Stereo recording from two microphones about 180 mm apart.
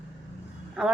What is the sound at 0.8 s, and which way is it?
Speech, 5° right (ahead or behind).